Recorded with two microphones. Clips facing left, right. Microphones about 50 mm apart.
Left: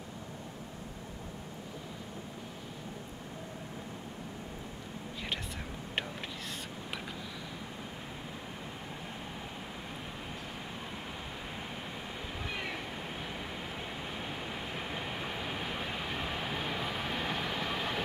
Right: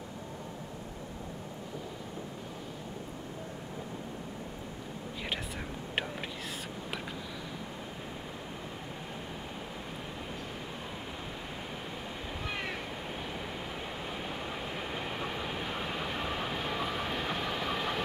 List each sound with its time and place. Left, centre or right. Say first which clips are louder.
14.8 s train: right 2 dB; centre